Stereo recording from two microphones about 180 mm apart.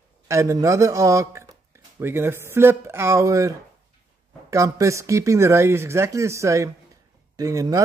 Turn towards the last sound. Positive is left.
turn(degrees=-20)  # may be behind; listen again after turning